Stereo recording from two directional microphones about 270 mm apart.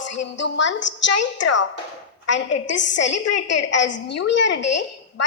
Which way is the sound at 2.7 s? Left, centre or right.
Left.